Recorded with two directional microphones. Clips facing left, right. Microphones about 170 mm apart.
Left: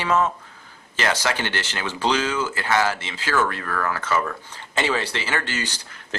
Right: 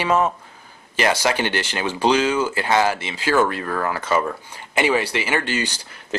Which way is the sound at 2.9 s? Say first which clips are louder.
Right 5 dB; 15° right (ahead or behind).